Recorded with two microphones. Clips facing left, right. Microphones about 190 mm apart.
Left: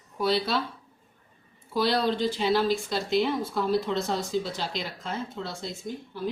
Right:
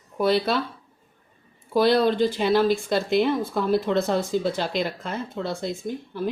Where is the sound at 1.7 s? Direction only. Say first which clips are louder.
Right 6 dB; 55° right (ahead or behind).